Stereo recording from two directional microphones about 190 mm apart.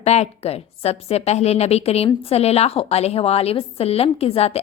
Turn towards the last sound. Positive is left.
turn(degrees=30)  # may be behind; listen again after turning